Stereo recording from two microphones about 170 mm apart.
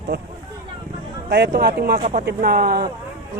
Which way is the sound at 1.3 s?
85° right.